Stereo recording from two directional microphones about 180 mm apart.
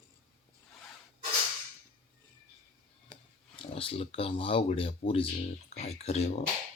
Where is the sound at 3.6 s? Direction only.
30° left (ahead or behind).